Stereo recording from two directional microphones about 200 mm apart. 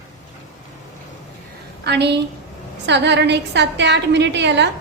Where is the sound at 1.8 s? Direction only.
55° right (ahead or behind).